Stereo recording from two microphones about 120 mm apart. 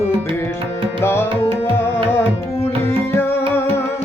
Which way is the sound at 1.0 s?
20° left (ahead or behind).